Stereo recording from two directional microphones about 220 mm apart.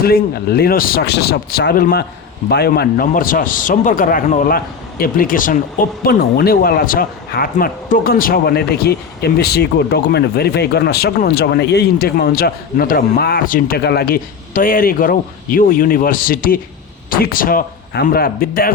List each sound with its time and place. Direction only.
0.0 s a man's voice: 45° left (ahead or behind)